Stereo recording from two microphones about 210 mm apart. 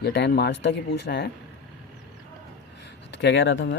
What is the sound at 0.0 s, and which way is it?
Speech, 55° left (ahead or behind).